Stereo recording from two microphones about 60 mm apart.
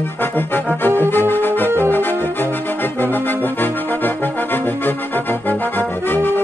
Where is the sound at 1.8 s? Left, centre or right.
Left.